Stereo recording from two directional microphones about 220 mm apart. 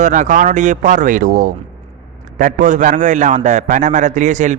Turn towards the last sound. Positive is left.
turn(degrees=-35)  # may be behind; listen again after turning